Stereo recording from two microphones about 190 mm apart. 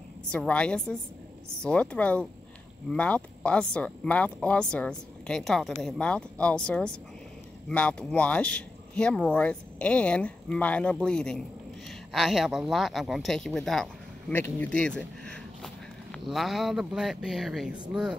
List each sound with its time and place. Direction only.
0.3 s speech: 5° left (ahead or behind)